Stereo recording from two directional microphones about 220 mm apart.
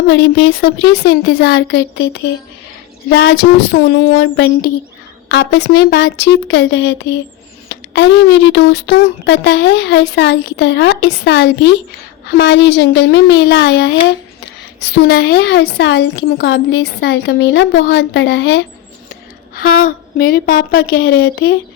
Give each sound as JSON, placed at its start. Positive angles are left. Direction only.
{"t": 0.1, "sound": "a woman's voice", "side_deg": 55}